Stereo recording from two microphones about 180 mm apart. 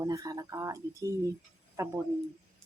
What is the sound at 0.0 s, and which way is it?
Speech, 20° right (ahead or behind).